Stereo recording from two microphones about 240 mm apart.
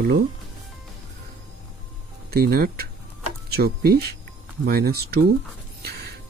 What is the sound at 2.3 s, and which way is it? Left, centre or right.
Speech, right.